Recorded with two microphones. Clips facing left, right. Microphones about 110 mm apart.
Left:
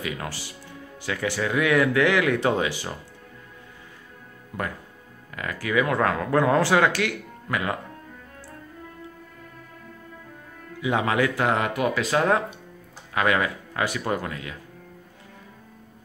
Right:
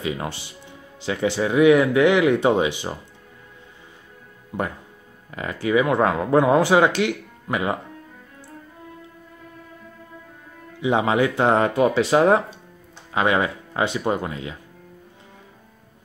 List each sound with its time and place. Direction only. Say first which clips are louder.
0.0 s speech: right 4 dB; 25° right (ahead or behind)
4.5 s speech: right 4 dB; 20° right (ahead or behind)
10.8 s speech: right 4 dB; 20° right (ahead or behind)